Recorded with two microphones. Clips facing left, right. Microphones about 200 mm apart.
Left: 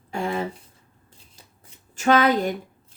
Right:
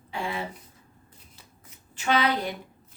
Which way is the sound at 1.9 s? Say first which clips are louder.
Left 6 dB; 45° left (ahead or behind).